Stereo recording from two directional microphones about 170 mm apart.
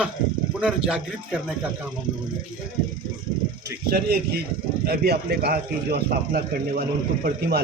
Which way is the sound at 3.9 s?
65° right (ahead or behind).